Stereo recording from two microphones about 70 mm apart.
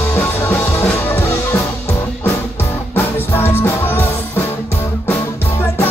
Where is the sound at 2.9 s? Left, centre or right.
Left.